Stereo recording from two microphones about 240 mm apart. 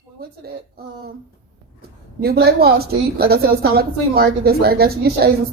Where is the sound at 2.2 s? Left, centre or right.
Right.